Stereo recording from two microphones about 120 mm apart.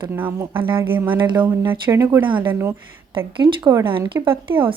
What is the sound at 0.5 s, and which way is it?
Speech, 45° right (ahead or behind).